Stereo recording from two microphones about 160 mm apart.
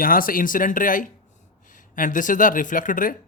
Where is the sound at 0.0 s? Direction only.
60° left (ahead or behind).